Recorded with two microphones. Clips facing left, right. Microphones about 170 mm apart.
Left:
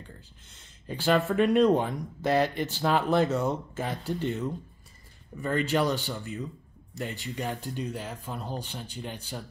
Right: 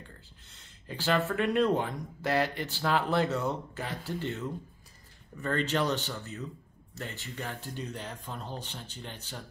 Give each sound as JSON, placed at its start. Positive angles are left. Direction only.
{"t": 0.5, "sound": "speech", "side_deg": 20}